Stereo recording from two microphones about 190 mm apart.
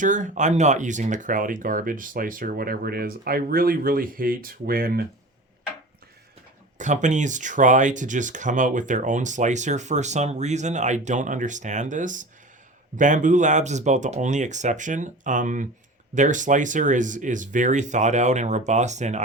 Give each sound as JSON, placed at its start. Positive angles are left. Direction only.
{"t": 0.0, "sound": "speech", "side_deg": -40}
{"t": 6.7, "sound": "speech", "side_deg": -40}